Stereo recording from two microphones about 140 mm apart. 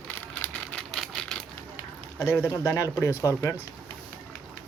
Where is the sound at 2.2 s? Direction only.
15° left (ahead or behind).